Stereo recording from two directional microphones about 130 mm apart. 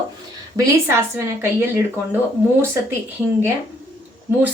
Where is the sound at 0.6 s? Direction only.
30° right (ahead or behind).